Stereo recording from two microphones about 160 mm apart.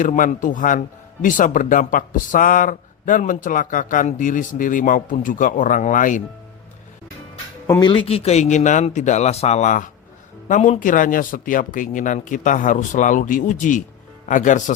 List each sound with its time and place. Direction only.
0.0 s speech: 55° left (ahead or behind)
7.7 s a man's voice: 25° left (ahead or behind); by 14.6 s 55° left (ahead or behind)